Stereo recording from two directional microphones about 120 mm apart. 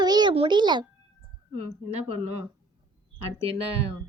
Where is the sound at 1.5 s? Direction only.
60° right (ahead or behind).